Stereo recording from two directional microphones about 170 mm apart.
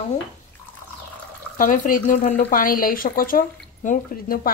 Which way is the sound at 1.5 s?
55° left (ahead or behind).